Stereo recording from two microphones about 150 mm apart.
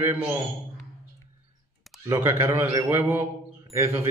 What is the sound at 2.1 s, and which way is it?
A man's voice, 20° right (ahead or behind).